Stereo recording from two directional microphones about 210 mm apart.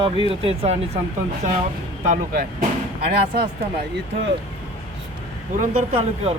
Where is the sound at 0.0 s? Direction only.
25° right (ahead or behind).